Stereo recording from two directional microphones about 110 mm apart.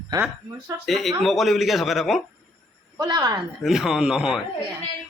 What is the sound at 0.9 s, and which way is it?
Speech, centre (ahead or behind).